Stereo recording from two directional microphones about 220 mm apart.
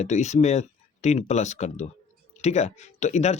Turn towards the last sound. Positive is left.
turn(degrees=30)  # may be behind; listen again after turning